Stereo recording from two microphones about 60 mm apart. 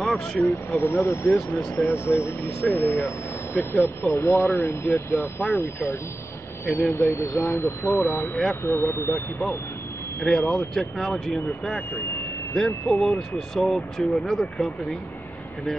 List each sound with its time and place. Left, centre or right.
0.0 s vehicle: centre
0.4 s speech: left
4.1 s speech: left
6.7 s speech: left
9.1 s speech: left
10.5 s speech: centre